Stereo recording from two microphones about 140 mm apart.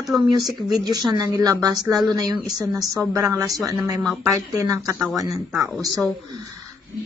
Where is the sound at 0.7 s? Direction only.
30° right (ahead or behind).